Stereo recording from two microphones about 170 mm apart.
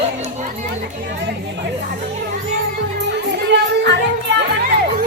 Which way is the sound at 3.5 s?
90° right.